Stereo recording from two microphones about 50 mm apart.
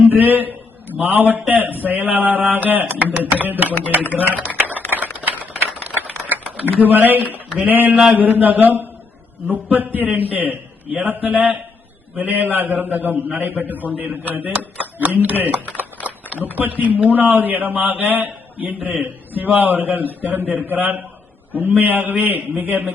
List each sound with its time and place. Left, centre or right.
0.1 s a man's voice: right
5.2 s typewriter: right
7.7 s a man's voice: right
16.0 s a sound: right
16.6 s a man's voice: right